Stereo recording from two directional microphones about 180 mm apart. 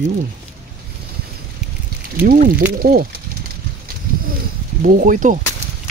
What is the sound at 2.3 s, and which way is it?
Speech, 50° right (ahead or behind).